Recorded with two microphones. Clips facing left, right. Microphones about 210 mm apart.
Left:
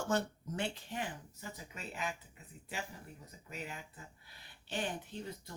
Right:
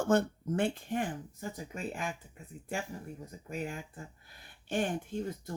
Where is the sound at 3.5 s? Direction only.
50° right (ahead or behind).